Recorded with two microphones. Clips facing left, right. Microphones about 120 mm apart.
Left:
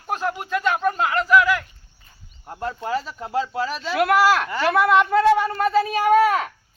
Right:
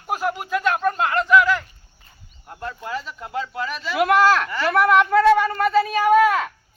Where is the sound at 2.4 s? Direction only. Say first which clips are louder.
Left 4 dB; 30° left (ahead or behind).